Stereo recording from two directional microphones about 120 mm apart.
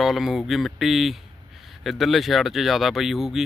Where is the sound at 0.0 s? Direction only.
Centre (ahead or behind).